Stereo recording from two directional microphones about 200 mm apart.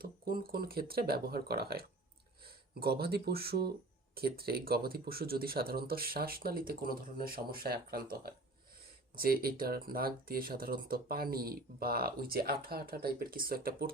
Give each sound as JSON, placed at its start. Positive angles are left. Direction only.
{"t": 0.0, "sound": "speech", "side_deg": -50}
{"t": 9.1, "sound": "speech", "side_deg": -50}